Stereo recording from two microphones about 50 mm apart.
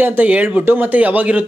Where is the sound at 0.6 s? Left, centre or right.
Right.